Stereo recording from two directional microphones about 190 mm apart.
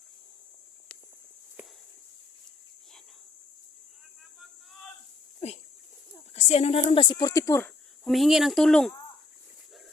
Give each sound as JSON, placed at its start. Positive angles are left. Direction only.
{"t": 6.3, "sound": "speech", "side_deg": 35}
{"t": 8.0, "sound": "speech", "side_deg": 0}